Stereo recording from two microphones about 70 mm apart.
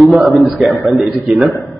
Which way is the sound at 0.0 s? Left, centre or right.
Centre.